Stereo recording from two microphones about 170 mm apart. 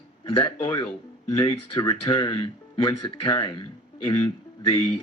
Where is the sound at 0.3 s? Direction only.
30° left (ahead or behind).